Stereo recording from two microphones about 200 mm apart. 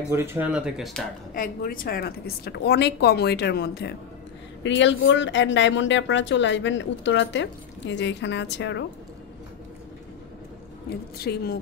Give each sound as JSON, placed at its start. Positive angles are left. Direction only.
{"t": 0.1, "sound": "speech", "side_deg": -10}
{"t": 1.3, "sound": "a woman's voice", "side_deg": 45}
{"t": 4.6, "sound": "speech", "side_deg": 65}
{"t": 11.1, "sound": "a woman's voice", "side_deg": 50}